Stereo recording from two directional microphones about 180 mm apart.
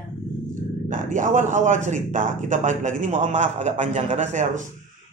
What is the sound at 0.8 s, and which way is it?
A man's voice, 45° right (ahead or behind).